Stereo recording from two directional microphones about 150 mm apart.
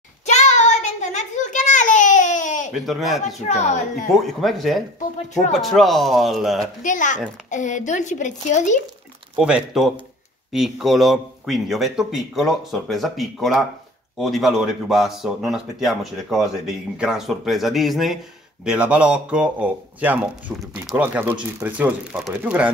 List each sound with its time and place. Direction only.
0.3 s child singing: 50° left (ahead or behind)
2.7 s speech: centre (ahead or behind)
3.4 s speech: 50° left (ahead or behind)
4.1 s speech: centre (ahead or behind)
6.8 s speech: 60° left (ahead or behind)
9.4 s speech: 5° right (ahead or behind)